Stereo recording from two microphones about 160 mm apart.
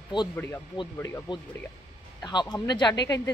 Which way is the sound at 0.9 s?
15° left (ahead or behind).